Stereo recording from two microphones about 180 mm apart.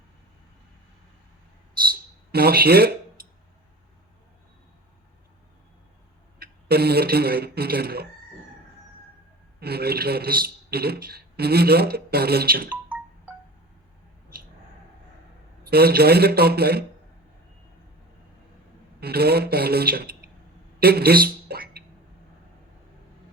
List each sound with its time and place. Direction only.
1.9 s a sound: 60° right (ahead or behind)
6.4 s speech: 60° right (ahead or behind)
9.6 s a man's voice: 60° right (ahead or behind)
12.7 s wind chime: 5° right (ahead or behind)
15.6 s a man's voice: 60° right (ahead or behind)
18.9 s a man's voice: 60° right (ahead or behind)
20.7 s a sound: 60° right (ahead or behind)